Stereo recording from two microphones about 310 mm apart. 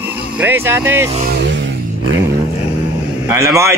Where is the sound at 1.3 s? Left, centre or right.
Right.